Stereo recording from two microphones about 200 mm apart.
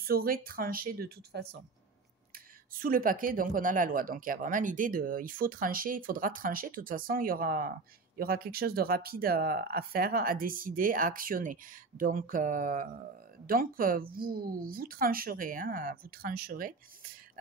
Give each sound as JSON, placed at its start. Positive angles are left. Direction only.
{"t": 0.0, "sound": "speech", "side_deg": -50}